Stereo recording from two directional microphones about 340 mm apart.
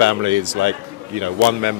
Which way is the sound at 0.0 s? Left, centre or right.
Right.